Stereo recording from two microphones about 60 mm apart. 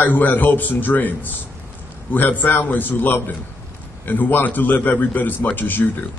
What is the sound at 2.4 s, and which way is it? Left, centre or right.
A man's voice, left.